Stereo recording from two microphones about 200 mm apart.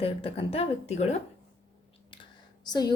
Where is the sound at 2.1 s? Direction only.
20° left (ahead or behind).